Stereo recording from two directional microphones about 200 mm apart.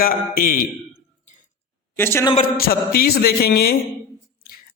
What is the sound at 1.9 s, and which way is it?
Speech, 10° left (ahead or behind).